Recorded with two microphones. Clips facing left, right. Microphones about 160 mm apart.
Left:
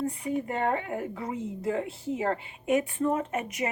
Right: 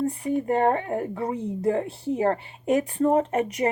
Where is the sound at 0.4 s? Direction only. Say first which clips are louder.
Right 7 dB; 40° right (ahead or behind).